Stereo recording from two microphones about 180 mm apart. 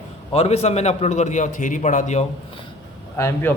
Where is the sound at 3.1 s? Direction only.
15° left (ahead or behind).